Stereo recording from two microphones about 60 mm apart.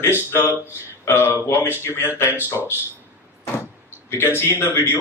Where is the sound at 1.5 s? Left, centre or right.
Left.